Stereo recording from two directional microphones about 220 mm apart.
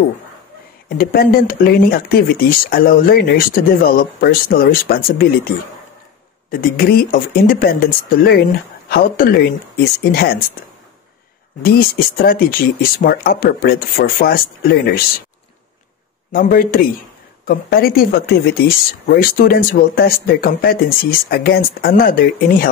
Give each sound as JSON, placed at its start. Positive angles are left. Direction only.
{"t": 0.8, "sound": "speech", "side_deg": 40}
{"t": 6.5, "sound": "speech", "side_deg": 40}
{"t": 12.2, "sound": "speech", "side_deg": 40}
{"t": 16.3, "sound": "speech", "side_deg": 40}